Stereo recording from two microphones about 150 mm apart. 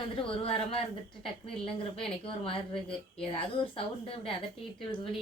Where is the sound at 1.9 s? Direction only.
35° left (ahead or behind).